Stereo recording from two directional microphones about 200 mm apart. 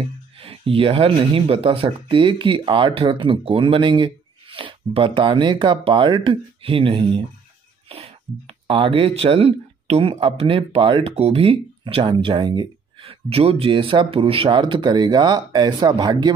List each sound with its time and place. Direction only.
0.4 s speech: 30° right (ahead or behind)